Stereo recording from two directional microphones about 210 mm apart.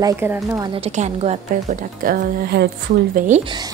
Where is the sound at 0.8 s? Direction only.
30° right (ahead or behind); by 2.7 s 45° right (ahead or behind).